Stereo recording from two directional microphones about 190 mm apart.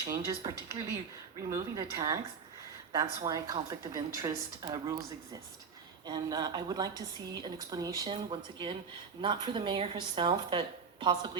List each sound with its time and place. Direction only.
0.0 s a woman's voice: 20° right (ahead or behind)